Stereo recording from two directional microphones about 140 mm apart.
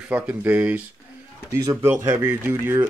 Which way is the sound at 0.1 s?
10° right (ahead or behind).